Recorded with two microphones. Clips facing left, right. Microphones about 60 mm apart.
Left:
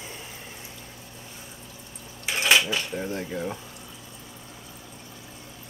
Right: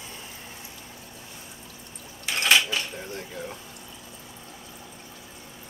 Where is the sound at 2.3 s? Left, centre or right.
Centre.